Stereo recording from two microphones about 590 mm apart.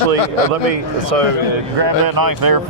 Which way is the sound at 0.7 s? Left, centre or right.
Right.